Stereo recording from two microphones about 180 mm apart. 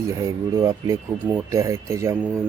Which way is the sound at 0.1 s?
15° right (ahead or behind).